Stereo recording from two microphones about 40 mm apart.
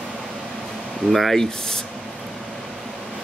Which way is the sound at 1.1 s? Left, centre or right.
Centre.